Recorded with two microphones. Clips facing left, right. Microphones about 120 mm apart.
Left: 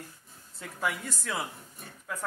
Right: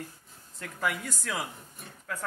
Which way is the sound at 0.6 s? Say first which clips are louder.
Right 1 dB; 5° left (ahead or behind).